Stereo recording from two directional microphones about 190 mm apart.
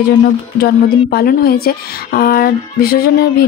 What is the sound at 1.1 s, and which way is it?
A woman's voice, 55° left (ahead or behind).